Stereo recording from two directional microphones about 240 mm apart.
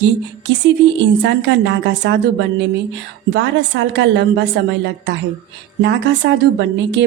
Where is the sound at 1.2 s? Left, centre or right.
Right.